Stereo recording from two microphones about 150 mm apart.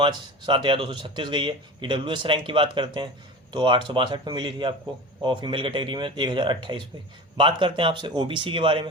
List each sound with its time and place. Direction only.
0.0 s speech: 30° right (ahead or behind)